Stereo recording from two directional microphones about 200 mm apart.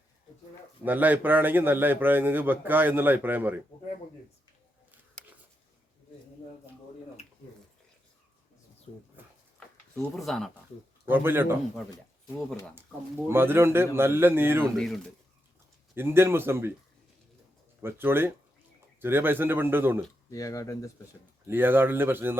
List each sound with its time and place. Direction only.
0.9 s a man's voice: 10° right (ahead or behind)
9.6 s a sound: 5° left (ahead or behind)
11.0 s a man's voice: 10° right (ahead or behind)
13.2 s a man's voice: 10° right (ahead or behind)
14.6 s speech: 5° left (ahead or behind)
16.0 s a man's voice: 10° right (ahead or behind)
17.8 s a man's voice: 10° right (ahead or behind)
20.3 s speech: 15° left (ahead or behind)
21.4 s a man's voice: 10° right (ahead or behind)